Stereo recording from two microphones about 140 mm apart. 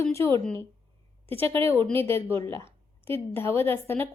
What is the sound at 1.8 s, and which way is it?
A woman's voice, 15° left (ahead or behind).